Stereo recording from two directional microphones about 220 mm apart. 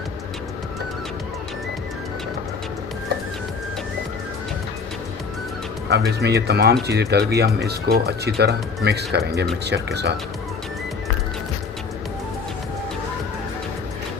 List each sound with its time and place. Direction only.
6.1 s speech: 50° right (ahead or behind)